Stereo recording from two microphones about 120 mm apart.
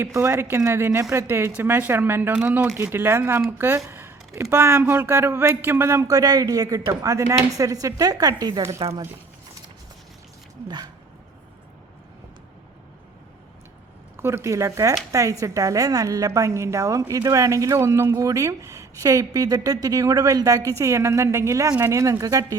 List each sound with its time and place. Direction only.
0.0 s a woman's voice: 20° right (ahead or behind)
3.8 s a sound: 20° right (ahead or behind)
4.4 s a woman's voice: 20° right (ahead or behind)
14.2 s a woman's voice: 20° right (ahead or behind)